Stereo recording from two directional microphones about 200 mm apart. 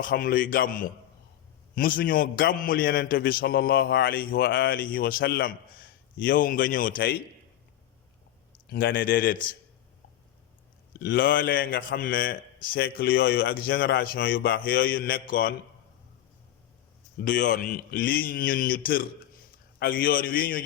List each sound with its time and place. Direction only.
0.0 s a man's voice: 45° left (ahead or behind)
8.7 s a man's voice: 50° left (ahead or behind)
11.0 s a man's voice: 50° left (ahead or behind)
17.2 s a man's voice: 45° left (ahead or behind)